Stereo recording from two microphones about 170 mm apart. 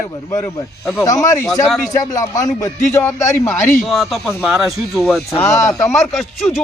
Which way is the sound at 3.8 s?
Centre (ahead or behind).